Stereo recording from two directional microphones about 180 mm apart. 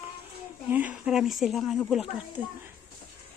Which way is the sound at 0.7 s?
10° right (ahead or behind).